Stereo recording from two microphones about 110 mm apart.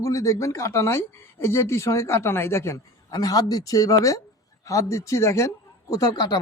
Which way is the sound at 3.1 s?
35° left (ahead or behind).